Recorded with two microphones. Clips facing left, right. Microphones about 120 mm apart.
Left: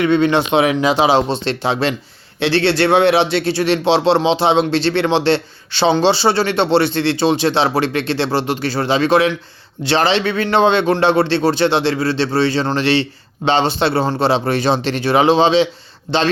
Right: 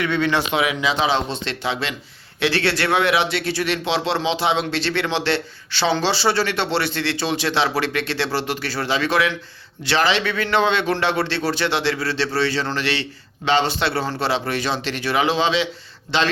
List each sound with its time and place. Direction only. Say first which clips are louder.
0.0 s speech: left 7 dB; 25° left (ahead or behind)
2.4 s speech: left 6 dB; 25° left (ahead or behind)